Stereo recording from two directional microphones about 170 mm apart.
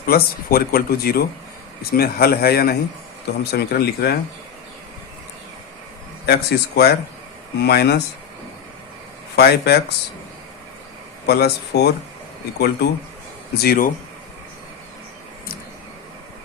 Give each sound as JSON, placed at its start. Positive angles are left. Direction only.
{"t": 0.1, "sound": "speech", "side_deg": 60}
{"t": 6.2, "sound": "speech", "side_deg": 70}
{"t": 9.3, "sound": "speech", "side_deg": 70}
{"t": 11.3, "sound": "speech", "side_deg": 70}